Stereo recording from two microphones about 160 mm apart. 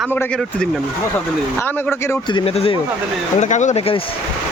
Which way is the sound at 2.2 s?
35° left (ahead or behind).